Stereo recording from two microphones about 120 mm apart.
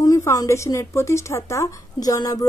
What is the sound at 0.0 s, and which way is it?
Speech, 30° left (ahead or behind).